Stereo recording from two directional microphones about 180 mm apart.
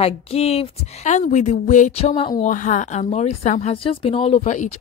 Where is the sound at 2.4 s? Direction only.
45° left (ahead or behind).